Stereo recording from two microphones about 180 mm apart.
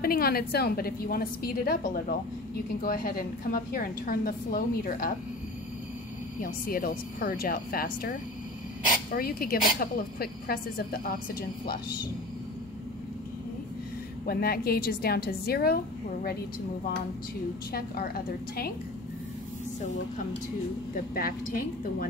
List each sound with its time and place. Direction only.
0.0 s a woman's voice: 55° left (ahead or behind)
6.4 s a woman's voice: 55° left (ahead or behind)
9.1 s a woman's voice: 55° left (ahead or behind)
14.2 s a woman's voice: 55° left (ahead or behind)
17.7 s a woman's voice: 55° left (ahead or behind)
20.9 s a woman's voice: 55° left (ahead or behind)